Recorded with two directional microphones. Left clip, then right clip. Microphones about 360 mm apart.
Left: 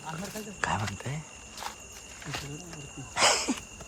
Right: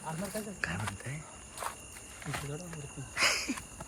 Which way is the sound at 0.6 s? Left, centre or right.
Centre.